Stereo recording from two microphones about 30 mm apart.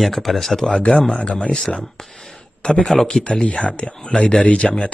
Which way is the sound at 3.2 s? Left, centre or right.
Left.